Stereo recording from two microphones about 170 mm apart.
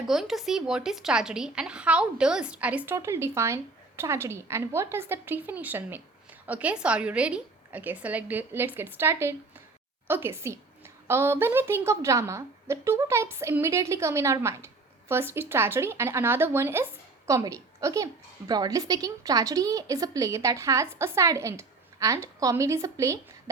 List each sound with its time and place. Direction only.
0.1 s a woman's voice: centre (ahead or behind); by 23.1 s 20° right (ahead or behind)